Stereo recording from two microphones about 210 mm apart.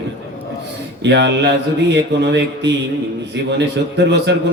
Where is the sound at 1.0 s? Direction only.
55° right (ahead or behind).